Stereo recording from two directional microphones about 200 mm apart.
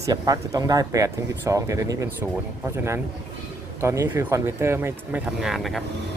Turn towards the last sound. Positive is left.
turn(degrees=0)  # may be behind; listen again after turning